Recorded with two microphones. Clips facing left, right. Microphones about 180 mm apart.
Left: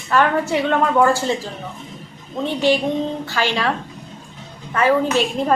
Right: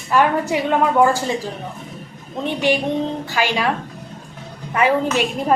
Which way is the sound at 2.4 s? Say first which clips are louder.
Left 1 dB; 15° right (ahead or behind).